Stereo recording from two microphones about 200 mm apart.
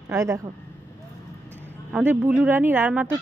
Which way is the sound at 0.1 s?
15° right (ahead or behind).